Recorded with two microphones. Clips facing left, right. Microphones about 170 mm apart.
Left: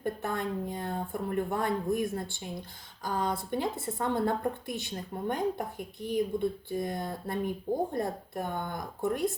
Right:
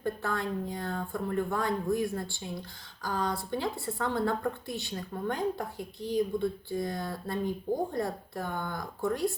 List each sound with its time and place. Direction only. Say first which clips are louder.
0.0 s speech: even; 20° left (ahead or behind)